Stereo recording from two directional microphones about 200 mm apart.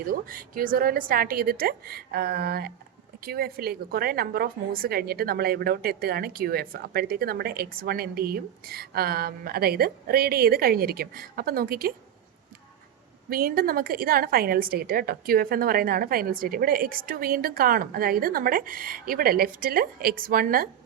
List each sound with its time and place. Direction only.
0.1 s a woman's voice: 45° right (ahead or behind)
13.3 s a woman's voice: 45° right (ahead or behind)